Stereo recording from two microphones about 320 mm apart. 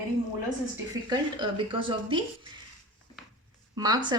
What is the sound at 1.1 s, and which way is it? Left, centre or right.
A woman's voice, centre.